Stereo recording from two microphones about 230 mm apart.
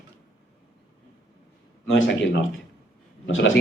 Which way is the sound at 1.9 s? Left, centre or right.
Left.